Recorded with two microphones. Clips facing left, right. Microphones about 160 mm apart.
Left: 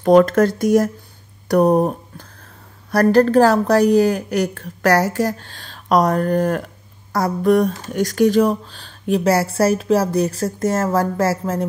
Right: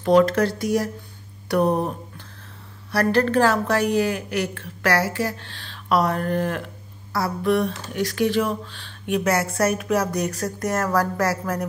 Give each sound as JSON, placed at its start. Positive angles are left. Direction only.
{"t": 0.0, "sound": "speech", "side_deg": 50}
{"t": 1.5, "sound": "a sound", "side_deg": 40}
{"t": 2.9, "sound": "speech", "side_deg": 40}